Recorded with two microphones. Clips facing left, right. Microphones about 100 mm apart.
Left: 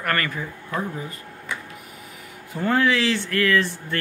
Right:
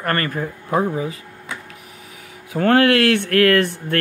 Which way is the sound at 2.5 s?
70° right (ahead or behind).